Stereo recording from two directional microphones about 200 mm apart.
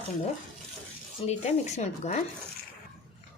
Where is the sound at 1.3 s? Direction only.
35° left (ahead or behind).